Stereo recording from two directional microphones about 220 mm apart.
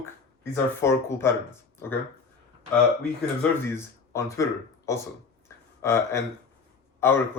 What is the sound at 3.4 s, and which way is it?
Speech, 10° left (ahead or behind).